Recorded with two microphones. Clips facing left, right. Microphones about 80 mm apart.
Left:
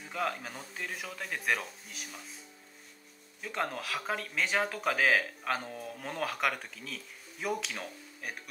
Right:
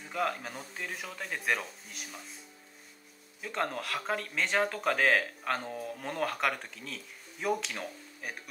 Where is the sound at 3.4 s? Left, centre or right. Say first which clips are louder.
Right 1 dB; centre.